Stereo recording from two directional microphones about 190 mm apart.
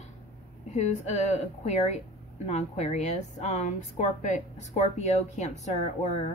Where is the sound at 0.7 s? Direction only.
35° left (ahead or behind).